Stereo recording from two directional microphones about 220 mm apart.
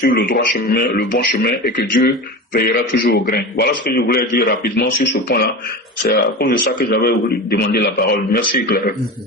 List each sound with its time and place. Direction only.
0.0 s a man's voice: 45° left (ahead or behind)
6.1 s a man's voice: 45° left (ahead or behind)